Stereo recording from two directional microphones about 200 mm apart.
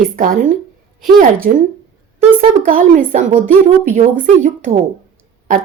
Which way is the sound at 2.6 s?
40° right (ahead or behind).